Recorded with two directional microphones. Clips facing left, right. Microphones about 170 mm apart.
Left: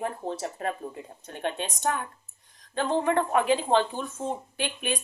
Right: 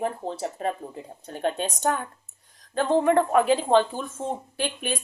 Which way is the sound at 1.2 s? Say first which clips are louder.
Right 4 dB; 35° right (ahead or behind).